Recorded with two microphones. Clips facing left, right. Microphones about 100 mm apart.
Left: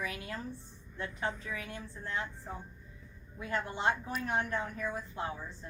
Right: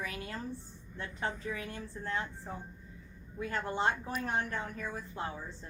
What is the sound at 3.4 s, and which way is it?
A woman's voice, 35° right (ahead or behind).